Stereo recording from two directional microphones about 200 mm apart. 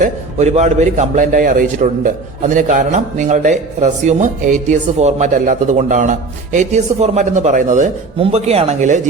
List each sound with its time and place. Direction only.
0.0 s a man's voice: 35° right (ahead or behind)